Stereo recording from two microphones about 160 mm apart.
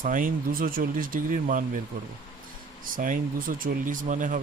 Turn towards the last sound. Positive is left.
turn(degrees=-55)  # may be behind; listen again after turning